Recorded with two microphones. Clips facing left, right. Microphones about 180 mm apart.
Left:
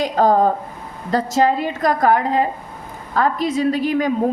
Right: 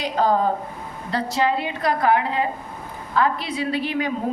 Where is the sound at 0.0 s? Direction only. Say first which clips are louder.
Left 5 dB; 45° left (ahead or behind).